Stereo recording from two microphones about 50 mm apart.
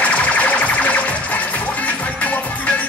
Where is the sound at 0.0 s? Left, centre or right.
Left.